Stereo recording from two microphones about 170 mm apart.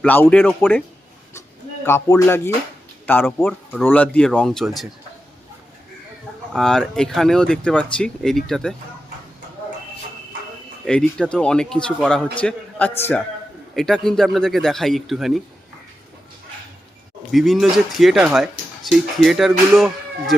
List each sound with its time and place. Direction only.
0.0 s a man's voice: 10° left (ahead or behind)
1.8 s a man's voice: 15° left (ahead or behind); by 4.9 s centre (ahead or behind)
6.5 s speech: 5° left (ahead or behind)
10.8 s a man's voice: 5° left (ahead or behind)
13.7 s speech: centre (ahead or behind)
17.3 s speech: centre (ahead or behind)